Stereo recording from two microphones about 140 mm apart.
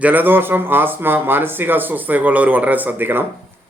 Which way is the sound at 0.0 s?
15° right (ahead or behind).